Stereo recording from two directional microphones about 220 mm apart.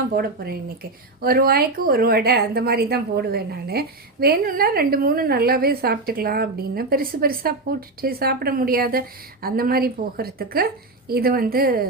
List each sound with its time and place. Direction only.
0.1 s speech: 45° right (ahead or behind)